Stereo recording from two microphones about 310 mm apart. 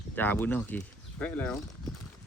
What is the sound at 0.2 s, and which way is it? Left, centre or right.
Speech, centre.